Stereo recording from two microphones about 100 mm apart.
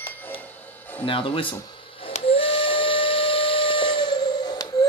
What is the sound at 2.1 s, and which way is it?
Steam whistle, 70° left (ahead or behind).